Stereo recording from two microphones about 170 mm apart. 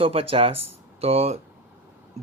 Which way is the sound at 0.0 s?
35° right (ahead or behind).